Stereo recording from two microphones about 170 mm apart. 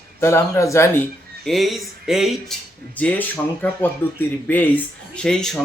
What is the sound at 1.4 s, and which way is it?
Speech, centre (ahead or behind).